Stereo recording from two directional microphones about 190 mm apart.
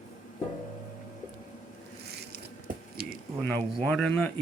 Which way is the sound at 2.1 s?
60° right (ahead or behind).